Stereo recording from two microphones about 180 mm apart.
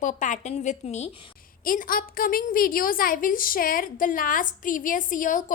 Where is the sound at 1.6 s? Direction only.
50° left (ahead or behind).